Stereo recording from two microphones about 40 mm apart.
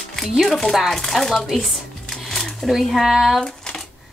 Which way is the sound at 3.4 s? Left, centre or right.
Centre.